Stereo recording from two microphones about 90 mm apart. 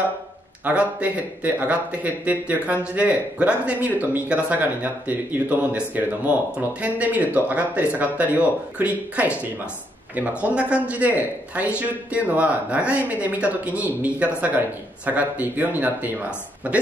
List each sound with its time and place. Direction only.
0.7 s speech: 15° right (ahead or behind)